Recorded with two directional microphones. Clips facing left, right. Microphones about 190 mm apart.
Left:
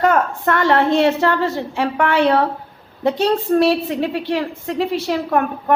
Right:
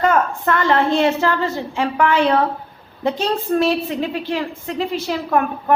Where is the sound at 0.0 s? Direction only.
55° left (ahead or behind).